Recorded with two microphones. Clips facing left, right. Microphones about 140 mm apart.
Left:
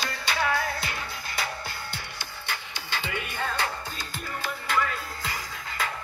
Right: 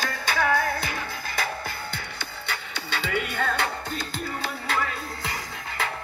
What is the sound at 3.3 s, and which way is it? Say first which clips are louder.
Music: right 3 dB; 65° right (ahead or behind).